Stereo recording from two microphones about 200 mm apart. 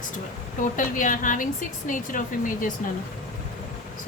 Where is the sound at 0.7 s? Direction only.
40° left (ahead or behind).